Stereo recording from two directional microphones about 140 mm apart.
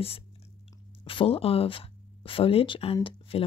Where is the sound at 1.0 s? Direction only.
40° left (ahead or behind).